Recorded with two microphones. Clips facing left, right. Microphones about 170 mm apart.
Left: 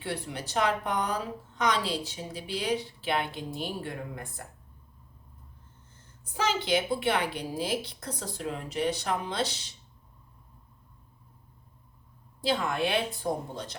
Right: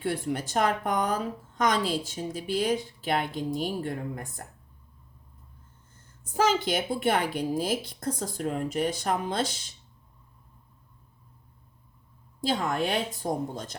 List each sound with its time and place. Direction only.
0.0 s a woman's voice: 50° right (ahead or behind)
6.3 s a woman's voice: 45° right (ahead or behind)
12.4 s a woman's voice: 45° right (ahead or behind)